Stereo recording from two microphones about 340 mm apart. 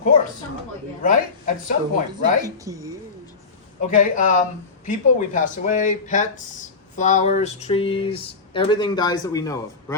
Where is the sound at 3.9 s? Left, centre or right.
Left.